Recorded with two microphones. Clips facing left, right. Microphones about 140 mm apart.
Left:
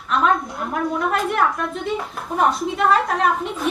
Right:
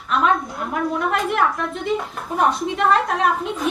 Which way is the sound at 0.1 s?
Centre (ahead or behind).